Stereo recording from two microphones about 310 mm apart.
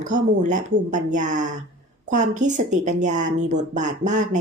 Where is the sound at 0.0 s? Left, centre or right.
Right.